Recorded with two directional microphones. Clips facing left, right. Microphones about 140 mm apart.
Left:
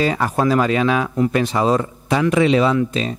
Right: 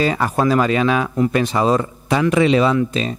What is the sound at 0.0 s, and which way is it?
Speech, 5° right (ahead or behind).